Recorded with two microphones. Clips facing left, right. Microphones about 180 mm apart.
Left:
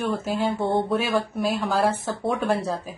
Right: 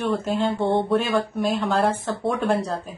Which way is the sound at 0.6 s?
25° right (ahead or behind).